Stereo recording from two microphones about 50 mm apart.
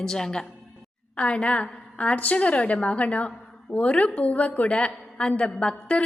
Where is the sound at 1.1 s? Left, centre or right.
Left.